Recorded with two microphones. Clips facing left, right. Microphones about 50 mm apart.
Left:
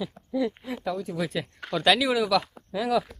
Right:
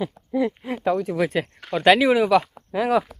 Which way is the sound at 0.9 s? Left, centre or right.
Right.